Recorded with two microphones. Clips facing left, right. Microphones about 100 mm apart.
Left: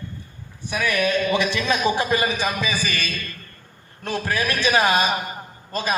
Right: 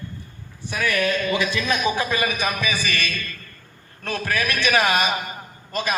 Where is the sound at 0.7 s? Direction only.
15° left (ahead or behind).